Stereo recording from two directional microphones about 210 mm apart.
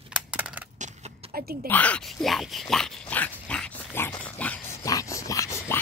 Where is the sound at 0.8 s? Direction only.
40° right (ahead or behind).